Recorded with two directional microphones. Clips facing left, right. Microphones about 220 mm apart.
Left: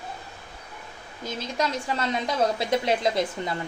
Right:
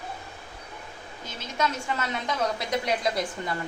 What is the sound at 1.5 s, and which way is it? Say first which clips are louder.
A woman's voice: even; 35° left (ahead or behind).